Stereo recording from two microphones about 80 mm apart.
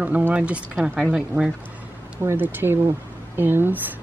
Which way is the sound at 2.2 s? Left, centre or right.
Right.